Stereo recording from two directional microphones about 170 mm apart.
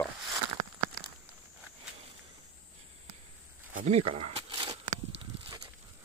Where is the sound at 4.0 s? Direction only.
35° right (ahead or behind).